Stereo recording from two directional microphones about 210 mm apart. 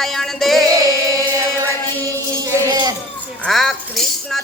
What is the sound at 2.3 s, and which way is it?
Music, 15° right (ahead or behind).